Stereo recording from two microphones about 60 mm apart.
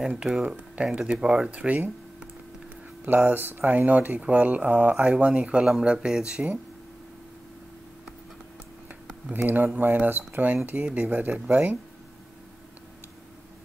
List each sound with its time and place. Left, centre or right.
0.2 s speech: centre
1.5 s speech: right
3.1 s speech: right; by 6.6 s centre
9.3 s speech: right